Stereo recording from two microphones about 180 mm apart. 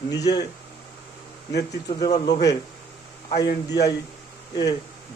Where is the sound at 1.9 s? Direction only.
25° left (ahead or behind).